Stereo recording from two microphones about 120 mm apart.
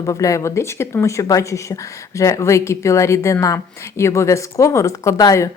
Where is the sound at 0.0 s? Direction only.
25° left (ahead or behind).